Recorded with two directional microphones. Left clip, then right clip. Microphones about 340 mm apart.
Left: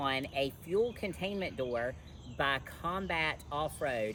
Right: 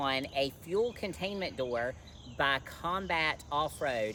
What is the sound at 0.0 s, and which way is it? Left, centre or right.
Speech, centre.